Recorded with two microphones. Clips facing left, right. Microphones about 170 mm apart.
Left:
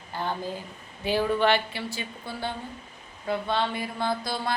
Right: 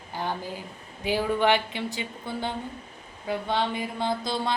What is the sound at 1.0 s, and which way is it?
Speech, 15° right (ahead or behind).